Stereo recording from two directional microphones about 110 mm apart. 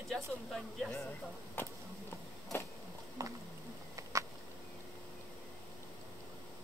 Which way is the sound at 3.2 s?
30° right (ahead or behind).